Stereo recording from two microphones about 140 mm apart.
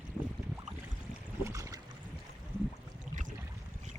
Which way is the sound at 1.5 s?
20° right (ahead or behind).